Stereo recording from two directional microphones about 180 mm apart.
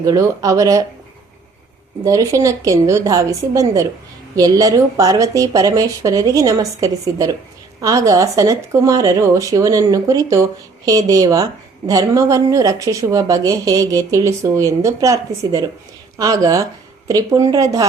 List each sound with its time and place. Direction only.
0.0 s speech: 20° right (ahead or behind)
2.0 s speech: 20° right (ahead or behind)